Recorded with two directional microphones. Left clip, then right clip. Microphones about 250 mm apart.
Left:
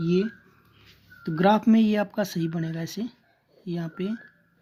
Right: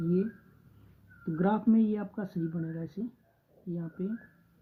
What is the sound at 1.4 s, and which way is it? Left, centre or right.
Speech, left.